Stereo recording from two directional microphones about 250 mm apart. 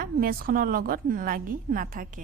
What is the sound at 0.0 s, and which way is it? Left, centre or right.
Speech, right.